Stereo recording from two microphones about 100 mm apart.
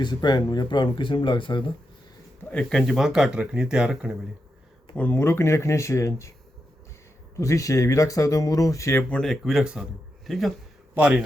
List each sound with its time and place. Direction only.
0.0 s speech: 45° left (ahead or behind)
2.4 s speech: 10° left (ahead or behind); by 4.2 s 5° right (ahead or behind)
4.9 s speech: 15° left (ahead or behind)
7.3 s speech: 30° left (ahead or behind)
9.0 s speech: 15° left (ahead or behind)
9.2 s speech: centre (ahead or behind)
10.9 s a man's voice: 15° right (ahead or behind)